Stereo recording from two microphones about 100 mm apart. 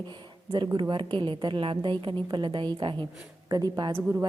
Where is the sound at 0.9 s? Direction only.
55° right (ahead or behind).